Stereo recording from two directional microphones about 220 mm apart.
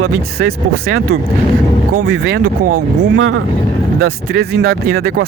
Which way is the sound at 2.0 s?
65° right (ahead or behind).